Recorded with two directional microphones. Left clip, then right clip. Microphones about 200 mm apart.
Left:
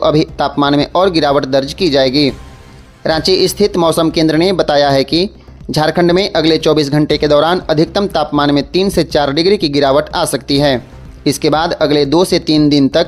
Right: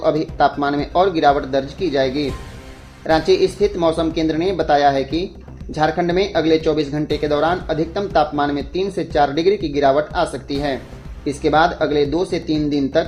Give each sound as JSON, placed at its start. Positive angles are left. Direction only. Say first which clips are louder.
{"t": 0.0, "sound": "speech", "louder": "left 4 dB", "side_deg": 40}